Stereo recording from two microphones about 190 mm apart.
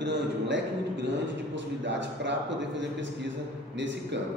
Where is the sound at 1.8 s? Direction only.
70° right (ahead or behind).